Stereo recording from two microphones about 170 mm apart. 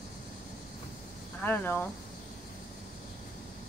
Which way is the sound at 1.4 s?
10° left (ahead or behind).